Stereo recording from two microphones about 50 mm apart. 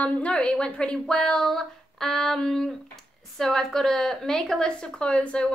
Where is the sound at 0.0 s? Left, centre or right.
Left.